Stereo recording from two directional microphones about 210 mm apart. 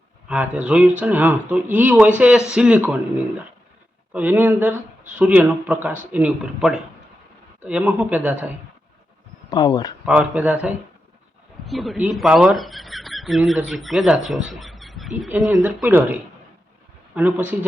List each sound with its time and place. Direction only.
0.3 s speech: 5° right (ahead or behind)
4.1 s speech: 10° right (ahead or behind)
9.5 s speech: 20° left (ahead or behind)
10.1 s speech: 5° right (ahead or behind)
17.2 s speech: 10° right (ahead or behind)